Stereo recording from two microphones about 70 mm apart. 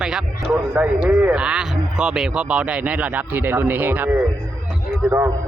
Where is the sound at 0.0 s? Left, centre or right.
Centre.